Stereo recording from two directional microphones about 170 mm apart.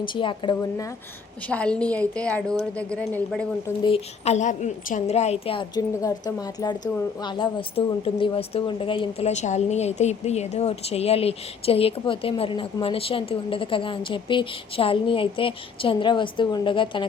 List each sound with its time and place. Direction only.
0.0 s speech: 30° left (ahead or behind)
1.5 s a woman's voice: 5° left (ahead or behind)
3.8 s a woman's voice: 35° left (ahead or behind)